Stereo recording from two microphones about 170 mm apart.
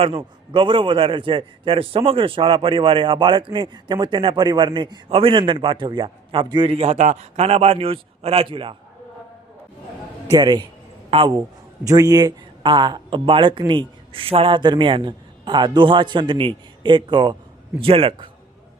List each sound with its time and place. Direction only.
0.0 s a man's voice: 35° right (ahead or behind)
10.3 s a man's voice: 25° right (ahead or behind)